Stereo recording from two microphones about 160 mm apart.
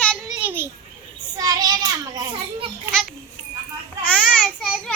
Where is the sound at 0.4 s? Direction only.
15° right (ahead or behind).